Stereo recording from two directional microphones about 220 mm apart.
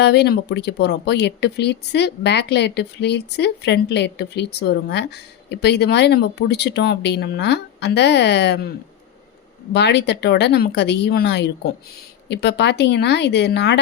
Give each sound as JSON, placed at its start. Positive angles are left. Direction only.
{"t": 0.0, "sound": "speech", "side_deg": 50}
{"t": 9.7, "sound": "speech", "side_deg": 50}